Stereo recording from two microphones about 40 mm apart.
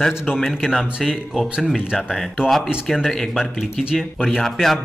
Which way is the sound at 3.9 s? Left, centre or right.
Centre.